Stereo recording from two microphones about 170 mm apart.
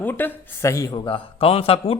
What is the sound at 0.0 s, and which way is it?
A man's voice, 10° left (ahead or behind).